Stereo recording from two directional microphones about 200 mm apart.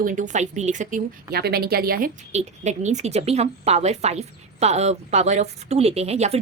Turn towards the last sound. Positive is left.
turn(degrees=-30)  # may be behind; listen again after turning